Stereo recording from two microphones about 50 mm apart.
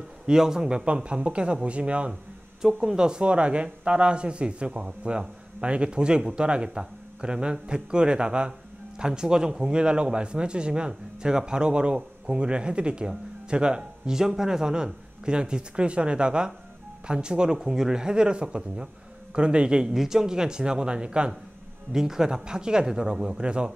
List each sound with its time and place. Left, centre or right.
0.3 s a man's voice: centre
2.6 s a man's voice: centre